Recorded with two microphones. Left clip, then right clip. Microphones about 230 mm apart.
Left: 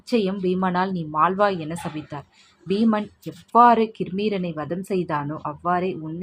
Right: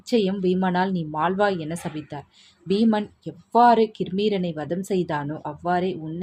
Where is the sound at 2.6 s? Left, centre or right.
Centre.